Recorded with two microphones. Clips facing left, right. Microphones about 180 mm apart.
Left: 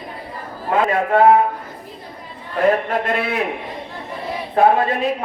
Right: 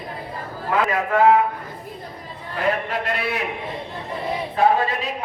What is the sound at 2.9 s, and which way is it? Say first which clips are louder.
Speech: left 4 dB; 50° left (ahead or behind).